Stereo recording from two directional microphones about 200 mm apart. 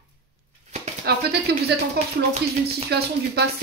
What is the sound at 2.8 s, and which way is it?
Speech, 55° right (ahead or behind).